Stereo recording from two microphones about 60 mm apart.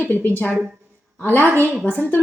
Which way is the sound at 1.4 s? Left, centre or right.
Right.